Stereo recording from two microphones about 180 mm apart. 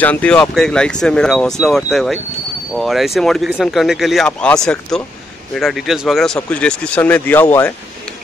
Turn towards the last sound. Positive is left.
turn(degrees=10)  # may be behind; listen again after turning